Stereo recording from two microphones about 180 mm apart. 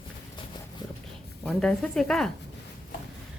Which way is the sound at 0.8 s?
20° left (ahead or behind).